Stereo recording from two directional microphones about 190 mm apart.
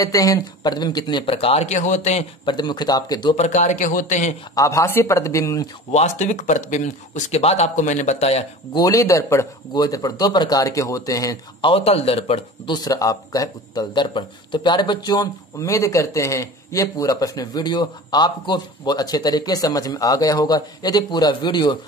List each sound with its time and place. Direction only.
0.0 s speech: 20° left (ahead or behind); by 2.2 s 40° left (ahead or behind)
2.4 s speech: 25° left (ahead or behind)
3.4 s speech: 40° left (ahead or behind)
4.6 s speech: 15° left (ahead or behind)
5.9 s speech: 35° left (ahead or behind)
8.7 s speech: 20° left (ahead or behind)
11.7 s speech: 30° left (ahead or behind)